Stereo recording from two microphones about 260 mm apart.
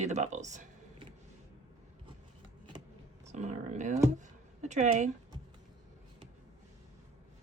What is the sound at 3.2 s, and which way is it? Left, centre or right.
Speech, right.